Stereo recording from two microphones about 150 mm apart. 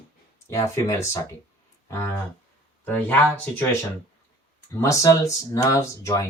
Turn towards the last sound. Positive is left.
turn(degrees=20)  # may be behind; listen again after turning